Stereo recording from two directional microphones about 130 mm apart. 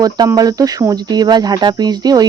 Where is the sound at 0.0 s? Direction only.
30° right (ahead or behind).